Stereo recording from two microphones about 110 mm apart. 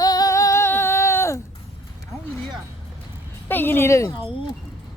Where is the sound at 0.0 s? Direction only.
35° left (ahead or behind).